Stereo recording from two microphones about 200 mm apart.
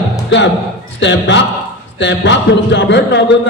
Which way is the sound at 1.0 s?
65° left (ahead or behind).